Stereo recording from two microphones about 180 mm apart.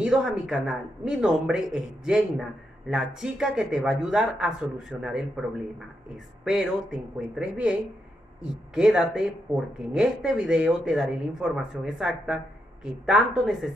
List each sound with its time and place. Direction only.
0.0 s speech: 5° right (ahead or behind)
6.4 s speech: 5° right (ahead or behind)